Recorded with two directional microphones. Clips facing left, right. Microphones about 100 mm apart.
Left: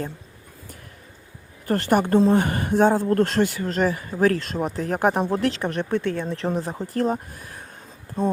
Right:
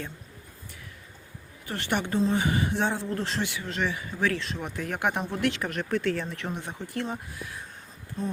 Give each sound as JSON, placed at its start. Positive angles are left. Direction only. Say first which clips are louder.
{"t": 1.6, "sound": "speech", "louder": "left 9 dB", "side_deg": 45}
{"t": 5.6, "sound": "speech", "louder": "left 4 dB", "side_deg": 25}
{"t": 6.3, "sound": "speech", "louder": "left 9 dB", "side_deg": 35}